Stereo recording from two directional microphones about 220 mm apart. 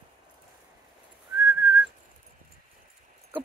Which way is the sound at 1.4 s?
10° right (ahead or behind).